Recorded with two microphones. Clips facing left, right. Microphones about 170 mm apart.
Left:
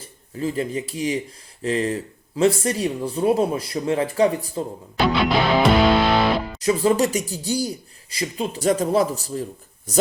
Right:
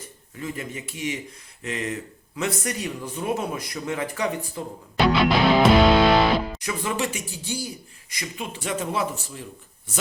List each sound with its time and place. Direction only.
0.3 s speech: 30° left (ahead or behind)
5.0 s music: centre (ahead or behind)
6.7 s speech: 35° left (ahead or behind)